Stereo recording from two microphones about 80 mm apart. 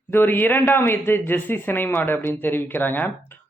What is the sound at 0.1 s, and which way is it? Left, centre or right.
Speech, left.